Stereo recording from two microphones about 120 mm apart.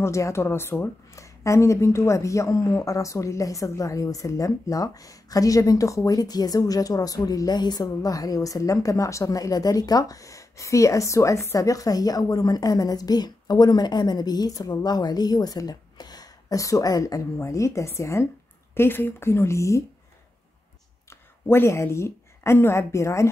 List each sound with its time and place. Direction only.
0.0 s a woman's voice: 25° left (ahead or behind)
21.1 s speech: 20° left (ahead or behind)